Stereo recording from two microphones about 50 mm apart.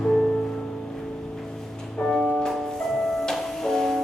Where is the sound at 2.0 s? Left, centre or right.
Centre.